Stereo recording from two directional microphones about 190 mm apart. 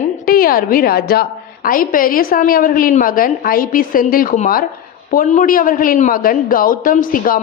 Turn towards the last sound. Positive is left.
turn(degrees=45)  # may be behind; listen again after turning